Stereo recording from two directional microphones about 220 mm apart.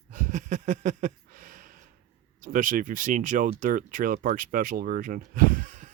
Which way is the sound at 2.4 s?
35° right (ahead or behind).